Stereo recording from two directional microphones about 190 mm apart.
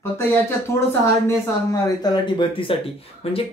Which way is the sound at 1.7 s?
20° left (ahead or behind).